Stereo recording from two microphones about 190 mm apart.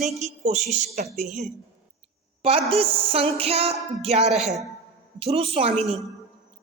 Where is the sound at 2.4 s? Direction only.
30° right (ahead or behind).